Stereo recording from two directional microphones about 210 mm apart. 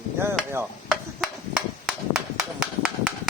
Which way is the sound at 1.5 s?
5° right (ahead or behind).